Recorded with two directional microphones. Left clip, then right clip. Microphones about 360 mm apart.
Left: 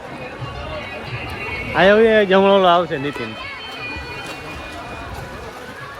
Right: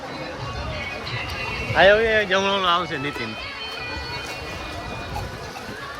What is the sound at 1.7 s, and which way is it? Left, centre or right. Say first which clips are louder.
Speech: left 2 dB; left.